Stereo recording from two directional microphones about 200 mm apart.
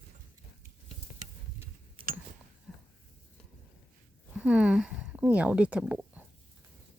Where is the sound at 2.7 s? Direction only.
Centre (ahead or behind).